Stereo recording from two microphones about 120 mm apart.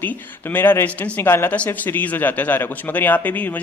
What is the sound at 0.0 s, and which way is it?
Speech, 15° left (ahead or behind).